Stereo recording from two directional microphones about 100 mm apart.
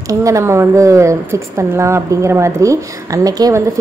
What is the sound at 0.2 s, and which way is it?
A woman's voice, 30° right (ahead or behind).